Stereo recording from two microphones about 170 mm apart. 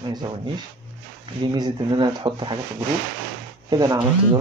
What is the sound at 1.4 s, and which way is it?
Speech, 25° right (ahead or behind).